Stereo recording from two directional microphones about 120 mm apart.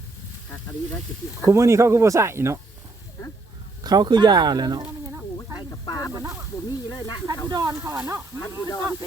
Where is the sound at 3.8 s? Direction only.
35° right (ahead or behind).